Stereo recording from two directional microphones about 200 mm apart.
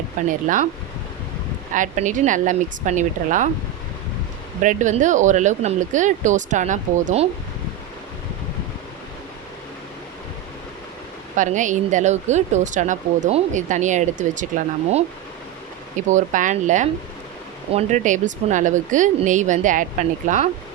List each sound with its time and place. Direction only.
0.3 s speech: 40° right (ahead or behind)
1.7 s speech: 40° right (ahead or behind)
4.6 s speech: 40° right (ahead or behind)
11.3 s speech: 40° right (ahead or behind)